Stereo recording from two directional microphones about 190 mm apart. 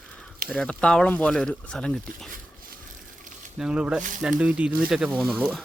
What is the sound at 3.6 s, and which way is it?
Speech, 5° right (ahead or behind).